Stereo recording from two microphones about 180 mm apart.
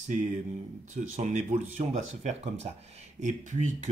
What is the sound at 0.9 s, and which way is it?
Speech, 40° right (ahead or behind).